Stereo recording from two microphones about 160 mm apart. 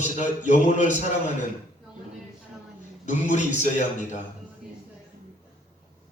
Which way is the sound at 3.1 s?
50° left (ahead or behind).